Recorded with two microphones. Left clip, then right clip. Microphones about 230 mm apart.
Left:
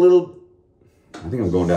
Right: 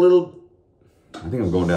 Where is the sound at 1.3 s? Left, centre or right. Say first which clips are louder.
Left 1 dB; centre.